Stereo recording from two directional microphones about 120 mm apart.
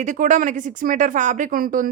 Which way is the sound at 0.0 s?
90° right.